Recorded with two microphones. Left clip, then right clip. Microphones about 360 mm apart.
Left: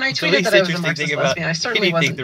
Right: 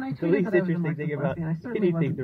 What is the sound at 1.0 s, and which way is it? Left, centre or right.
Speech, centre.